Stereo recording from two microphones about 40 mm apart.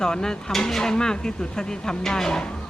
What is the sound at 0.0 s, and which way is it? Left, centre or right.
Speech, centre.